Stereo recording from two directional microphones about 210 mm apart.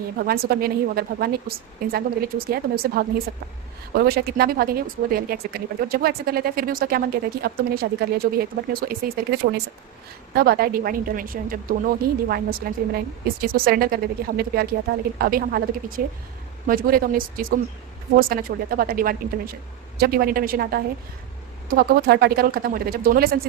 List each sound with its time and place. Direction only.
0.2 s speech: 45° right (ahead or behind)